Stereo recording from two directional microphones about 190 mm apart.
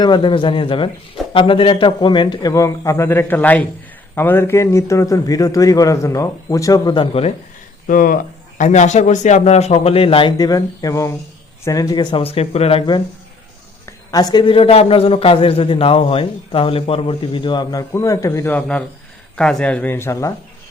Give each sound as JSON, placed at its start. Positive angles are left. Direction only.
{"t": 0.0, "sound": "a man's voice", "side_deg": 25}
{"t": 7.9, "sound": "a man's voice", "side_deg": 45}
{"t": 14.1, "sound": "a man's voice", "side_deg": 20}